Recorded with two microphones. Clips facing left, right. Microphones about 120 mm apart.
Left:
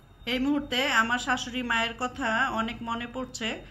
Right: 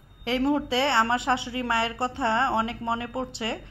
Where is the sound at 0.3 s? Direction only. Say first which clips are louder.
Right 3 dB; 30° right (ahead or behind).